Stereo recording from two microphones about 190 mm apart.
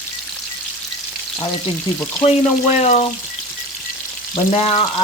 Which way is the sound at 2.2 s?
35° left (ahead or behind).